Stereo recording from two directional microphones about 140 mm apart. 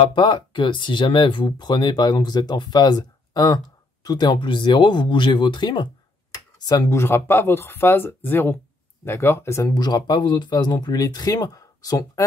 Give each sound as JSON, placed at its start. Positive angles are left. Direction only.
{"t": 0.0, "sound": "speech", "side_deg": 35}